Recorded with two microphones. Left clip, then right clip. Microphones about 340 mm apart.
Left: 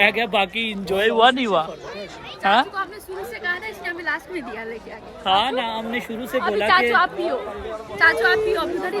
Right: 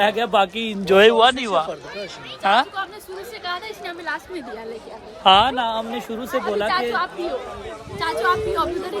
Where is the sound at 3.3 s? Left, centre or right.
Centre.